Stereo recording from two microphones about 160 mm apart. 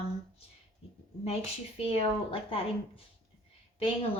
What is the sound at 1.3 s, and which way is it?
Speech, 40° left (ahead or behind).